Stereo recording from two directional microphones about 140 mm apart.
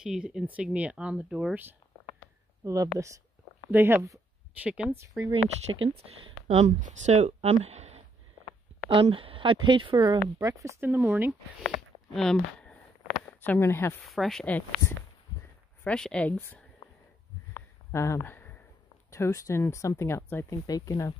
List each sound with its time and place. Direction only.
0.0 s speech: 5° right (ahead or behind)
2.6 s speech: 25° right (ahead or behind)
4.6 s speech: 10° right (ahead or behind)
4.9 s speech: 20° right (ahead or behind)
5.3 s speech: 40° right (ahead or behind)
10.4 s speech: 20° right (ahead or behind)
11.7 s a sound: 5° left (ahead or behind)
13.4 s speech: 15° left (ahead or behind)
14.0 s speech: centre (ahead or behind)
17.6 s a sound: 20° left (ahead or behind)
19.0 s speech: 20° left (ahead or behind)